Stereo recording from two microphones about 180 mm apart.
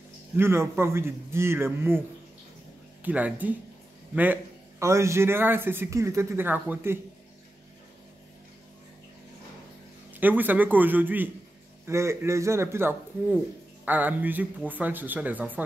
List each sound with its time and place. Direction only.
0.4 s a man's voice: 15° right (ahead or behind)
10.1 s a man's voice: 10° right (ahead or behind)